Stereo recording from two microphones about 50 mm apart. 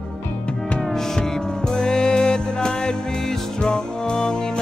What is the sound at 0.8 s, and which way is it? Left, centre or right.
Music, centre.